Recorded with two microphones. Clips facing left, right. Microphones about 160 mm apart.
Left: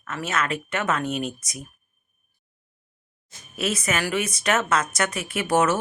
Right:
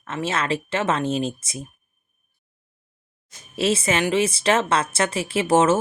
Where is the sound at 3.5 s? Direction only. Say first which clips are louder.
Right 5 dB; 30° right (ahead or behind).